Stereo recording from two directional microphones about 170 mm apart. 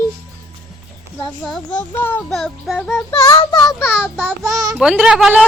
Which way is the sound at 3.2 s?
25° left (ahead or behind).